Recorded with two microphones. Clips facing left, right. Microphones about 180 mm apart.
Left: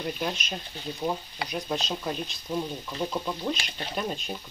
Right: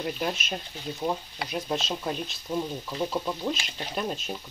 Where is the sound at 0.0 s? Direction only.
5° right (ahead or behind).